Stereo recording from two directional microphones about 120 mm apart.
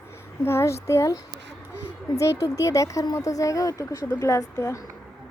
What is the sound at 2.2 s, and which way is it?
Speech, 25° left (ahead or behind).